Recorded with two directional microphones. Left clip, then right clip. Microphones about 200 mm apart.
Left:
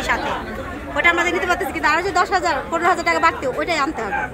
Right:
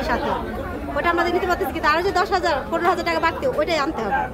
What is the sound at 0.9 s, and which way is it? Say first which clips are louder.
A woman's voice: left 3 dB; 20° left (ahead or behind).